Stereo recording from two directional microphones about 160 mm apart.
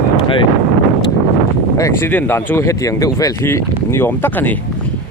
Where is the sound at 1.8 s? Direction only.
15° left (ahead or behind).